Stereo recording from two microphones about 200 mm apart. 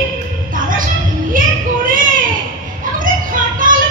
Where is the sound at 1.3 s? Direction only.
40° right (ahead or behind).